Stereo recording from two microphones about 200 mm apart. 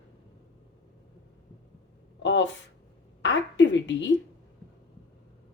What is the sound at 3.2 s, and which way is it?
Speech, 65° left (ahead or behind).